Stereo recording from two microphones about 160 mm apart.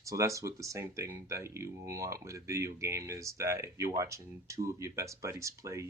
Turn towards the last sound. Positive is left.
turn(degrees=-20)  # may be behind; listen again after turning